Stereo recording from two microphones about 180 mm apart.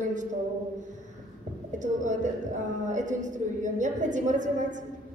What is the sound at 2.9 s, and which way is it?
A woman's voice, 45° right (ahead or behind).